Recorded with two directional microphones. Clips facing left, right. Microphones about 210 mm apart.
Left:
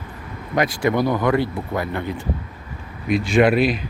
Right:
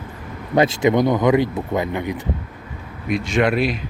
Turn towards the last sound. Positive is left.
turn(degrees=0)  # may be behind; listen again after turning